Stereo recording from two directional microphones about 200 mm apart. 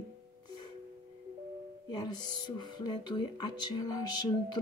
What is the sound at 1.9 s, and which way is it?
Speech, 20° left (ahead or behind).